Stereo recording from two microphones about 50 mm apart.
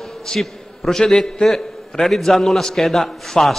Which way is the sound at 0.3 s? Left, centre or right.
Centre.